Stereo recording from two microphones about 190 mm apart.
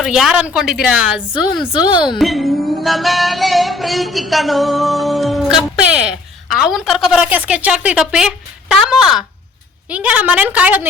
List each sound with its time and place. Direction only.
0.0 s music: centre (ahead or behind)
1.8 s speech: 25° left (ahead or behind)
2.1 s music: centre (ahead or behind)
9.9 s a woman's voice: 5° right (ahead or behind)